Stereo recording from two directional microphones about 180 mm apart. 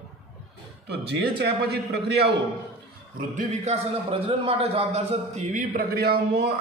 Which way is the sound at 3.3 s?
40° right (ahead or behind).